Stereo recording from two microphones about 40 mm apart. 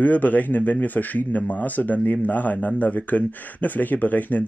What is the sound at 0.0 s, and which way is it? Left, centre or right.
Speech, left.